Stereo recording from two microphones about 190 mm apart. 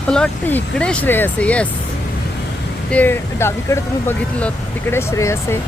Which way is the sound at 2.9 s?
10° left (ahead or behind).